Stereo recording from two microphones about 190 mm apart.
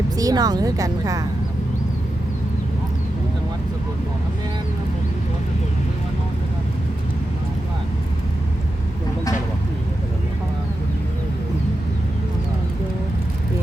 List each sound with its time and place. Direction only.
0.2 s speech: 20° right (ahead or behind)